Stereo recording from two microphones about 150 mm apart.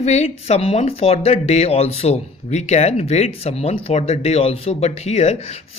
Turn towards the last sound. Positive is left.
turn(degrees=45)  # may be behind; listen again after turning